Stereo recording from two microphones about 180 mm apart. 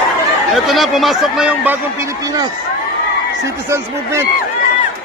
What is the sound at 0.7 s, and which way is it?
A man's voice, centre (ahead or behind).